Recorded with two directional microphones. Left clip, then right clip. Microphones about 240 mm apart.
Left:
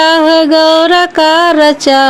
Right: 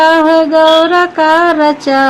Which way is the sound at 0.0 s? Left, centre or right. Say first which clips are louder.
Even; left.